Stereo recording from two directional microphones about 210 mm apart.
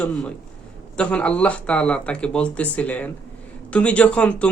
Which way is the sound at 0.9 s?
5° left (ahead or behind).